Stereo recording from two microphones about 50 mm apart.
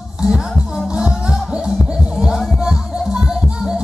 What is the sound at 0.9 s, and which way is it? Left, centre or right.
Music, centre.